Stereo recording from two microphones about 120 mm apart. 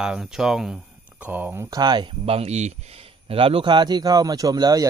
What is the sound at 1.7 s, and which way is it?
Speech, 35° right (ahead or behind).